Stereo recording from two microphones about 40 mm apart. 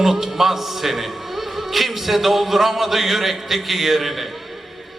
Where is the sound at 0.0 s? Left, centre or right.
Centre.